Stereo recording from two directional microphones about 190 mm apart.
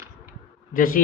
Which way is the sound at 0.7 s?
50° left (ahead or behind).